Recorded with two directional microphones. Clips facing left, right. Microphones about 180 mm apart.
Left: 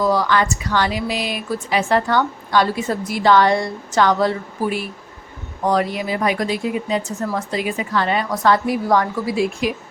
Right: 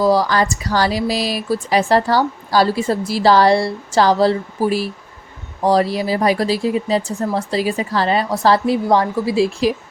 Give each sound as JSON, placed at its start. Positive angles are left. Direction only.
{"t": 0.0, "sound": "speech", "side_deg": -35}